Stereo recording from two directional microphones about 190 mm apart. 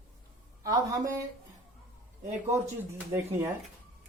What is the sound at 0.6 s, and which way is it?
Speech, 20° right (ahead or behind).